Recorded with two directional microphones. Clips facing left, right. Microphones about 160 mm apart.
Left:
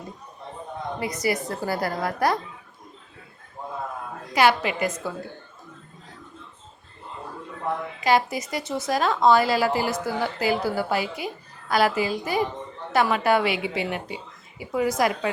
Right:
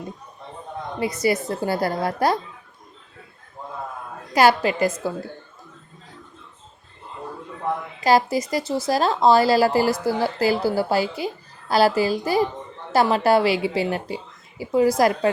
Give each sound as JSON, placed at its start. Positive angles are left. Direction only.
{"t": 0.9, "sound": "a woman's voice", "side_deg": -25}
{"t": 4.4, "sound": "speech", "side_deg": -35}
{"t": 8.0, "sound": "speech", "side_deg": -35}